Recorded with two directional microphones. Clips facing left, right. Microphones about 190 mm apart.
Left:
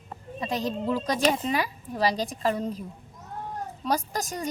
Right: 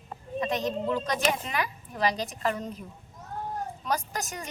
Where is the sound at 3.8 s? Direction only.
35° left (ahead or behind).